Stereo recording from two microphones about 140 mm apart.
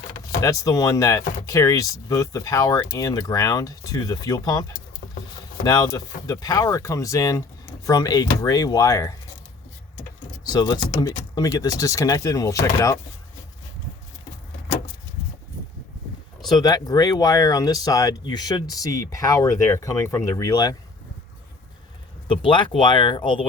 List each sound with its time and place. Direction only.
0.4 s speech: 25° left (ahead or behind)
5.6 s speech: 25° left (ahead or behind)
10.4 s speech: 30° left (ahead or behind)
16.5 s speech: 30° left (ahead or behind)
22.3 s speech: 35° left (ahead or behind)